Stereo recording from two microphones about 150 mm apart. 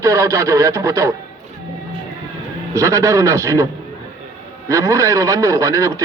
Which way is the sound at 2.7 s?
20° right (ahead or behind).